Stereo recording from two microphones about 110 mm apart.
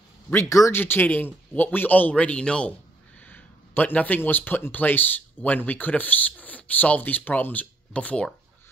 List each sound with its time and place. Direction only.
0.3 s a man's voice: 25° left (ahead or behind)